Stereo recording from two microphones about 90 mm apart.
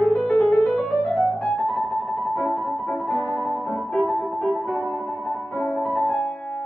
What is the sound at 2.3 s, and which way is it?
Music, 10° left (ahead or behind).